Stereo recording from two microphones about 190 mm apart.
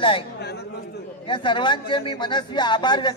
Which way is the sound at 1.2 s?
25° left (ahead or behind).